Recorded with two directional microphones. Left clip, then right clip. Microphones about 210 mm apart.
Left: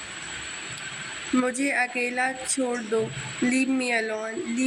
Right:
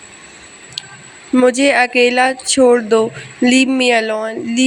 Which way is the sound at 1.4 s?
40° right (ahead or behind).